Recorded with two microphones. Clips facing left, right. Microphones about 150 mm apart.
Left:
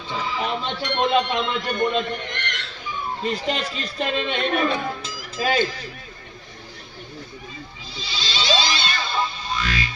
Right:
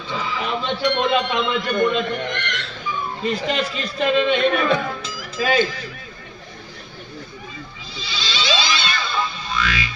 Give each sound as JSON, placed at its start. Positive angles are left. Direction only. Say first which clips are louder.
{"t": 0.1, "sound": "speech", "louder": "right 1 dB", "side_deg": 40}
{"t": 2.0, "sound": "a man's voice", "louder": "right 5 dB", "side_deg": -55}
{"t": 3.2, "sound": "speech", "louder": "right 3 dB", "side_deg": 40}
{"t": 7.9, "sound": "music", "louder": "right 1 dB", "side_deg": 45}